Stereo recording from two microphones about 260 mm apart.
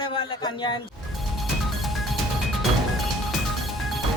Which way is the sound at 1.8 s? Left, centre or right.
Centre.